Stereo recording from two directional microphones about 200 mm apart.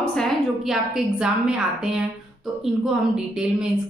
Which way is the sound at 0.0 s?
5° left (ahead or behind).